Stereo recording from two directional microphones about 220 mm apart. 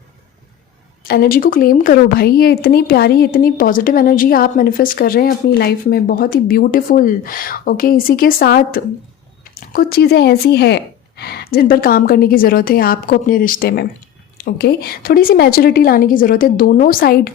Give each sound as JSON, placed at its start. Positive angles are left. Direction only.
{"t": 1.0, "sound": "a woman's voice", "side_deg": 45}